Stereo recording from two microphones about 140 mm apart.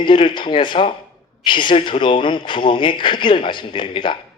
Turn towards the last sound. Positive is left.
turn(degrees=35)  # may be behind; listen again after turning